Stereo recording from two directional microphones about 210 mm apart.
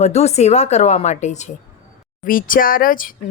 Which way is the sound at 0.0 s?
30° left (ahead or behind).